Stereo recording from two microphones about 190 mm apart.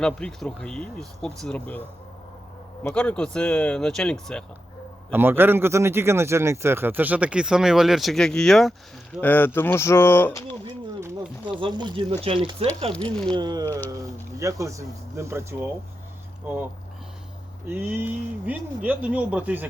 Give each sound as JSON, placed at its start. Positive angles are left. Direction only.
{"t": 0.0, "sound": "speech", "side_deg": 5}
{"t": 2.8, "sound": "speech", "side_deg": 5}
{"t": 5.1, "sound": "a man's voice", "side_deg": -10}
{"t": 10.7, "sound": "a man's voice", "side_deg": -25}
{"t": 17.7, "sound": "a man's voice", "side_deg": -10}